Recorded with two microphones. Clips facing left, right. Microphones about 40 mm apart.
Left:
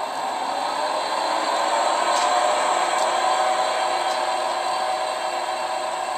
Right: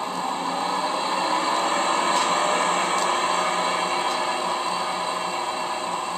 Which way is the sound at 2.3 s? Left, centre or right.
Right.